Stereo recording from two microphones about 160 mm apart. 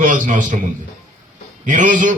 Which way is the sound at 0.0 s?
55° right (ahead or behind).